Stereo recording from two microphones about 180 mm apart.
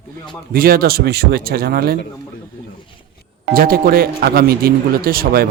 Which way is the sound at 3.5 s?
55° right (ahead or behind).